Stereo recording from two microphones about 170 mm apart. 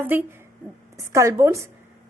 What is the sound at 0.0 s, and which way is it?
A woman's voice, 10° right (ahead or behind).